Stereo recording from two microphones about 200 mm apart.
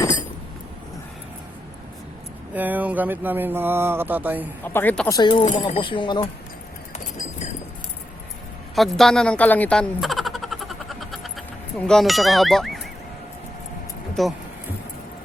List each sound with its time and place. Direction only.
2.6 s speech: 10° right (ahead or behind)
4.6 s speech: 10° left (ahead or behind)
8.7 s a sound: centre (ahead or behind)
11.9 s speech: centre (ahead or behind)
14.2 s speech: centre (ahead or behind)